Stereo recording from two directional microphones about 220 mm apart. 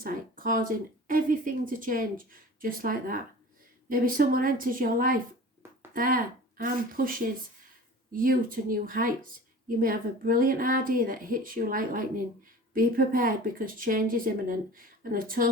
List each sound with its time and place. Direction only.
0.0 s speech: 40° right (ahead or behind)